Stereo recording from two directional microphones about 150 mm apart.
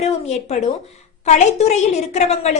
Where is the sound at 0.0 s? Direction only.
45° left (ahead or behind).